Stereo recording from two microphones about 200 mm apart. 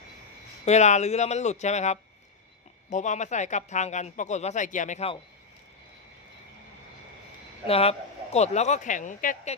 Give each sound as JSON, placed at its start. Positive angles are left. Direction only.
{"t": 0.6, "sound": "speech", "side_deg": 35}
{"t": 7.7, "sound": "speech", "side_deg": 30}